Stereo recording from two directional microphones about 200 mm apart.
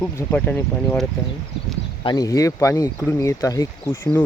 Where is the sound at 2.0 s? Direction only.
20° left (ahead or behind).